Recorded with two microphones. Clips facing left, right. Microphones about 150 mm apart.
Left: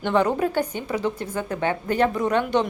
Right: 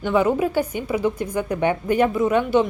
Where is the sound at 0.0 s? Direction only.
5° right (ahead or behind).